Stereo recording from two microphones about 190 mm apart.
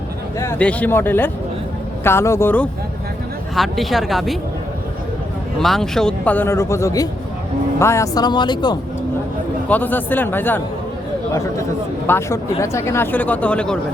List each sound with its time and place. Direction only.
0.3 s speech: 10° left (ahead or behind)
3.5 s a woman's voice: centre (ahead or behind)
5.5 s speech: centre (ahead or behind); by 8.8 s 25° left (ahead or behind)
9.6 s speech: 10° left (ahead or behind)
12.0 s speech: 15° left (ahead or behind)